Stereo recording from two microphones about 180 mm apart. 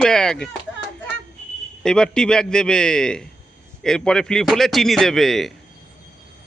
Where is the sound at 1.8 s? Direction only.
5° left (ahead or behind).